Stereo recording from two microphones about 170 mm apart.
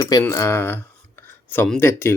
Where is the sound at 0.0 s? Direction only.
20° left (ahead or behind).